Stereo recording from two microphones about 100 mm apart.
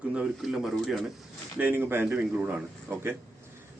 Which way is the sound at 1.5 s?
20° right (ahead or behind).